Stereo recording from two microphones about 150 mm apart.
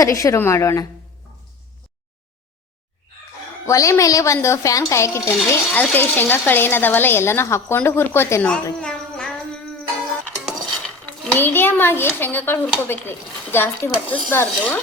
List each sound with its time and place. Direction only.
0.0 s a woman's voice: 20° left (ahead or behind)
3.7 s speech: 20° left (ahead or behind)
8.8 s a sound: 5° left (ahead or behind)
10.8 s speech: 5° left (ahead or behind)